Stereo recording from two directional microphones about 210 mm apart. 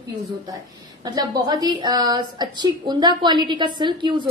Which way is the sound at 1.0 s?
20° right (ahead or behind).